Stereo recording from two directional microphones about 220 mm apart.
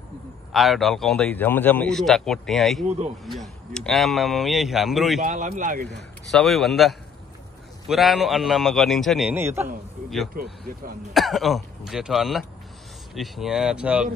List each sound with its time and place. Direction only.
0.5 s a man's voice: centre (ahead or behind)
5.2 s speech: 35° right (ahead or behind)
6.3 s a man's voice: centre (ahead or behind)
11.1 s a man's voice: centre (ahead or behind)